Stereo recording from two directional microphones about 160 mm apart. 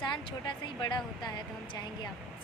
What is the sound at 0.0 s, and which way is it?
A man's voice, 30° left (ahead or behind).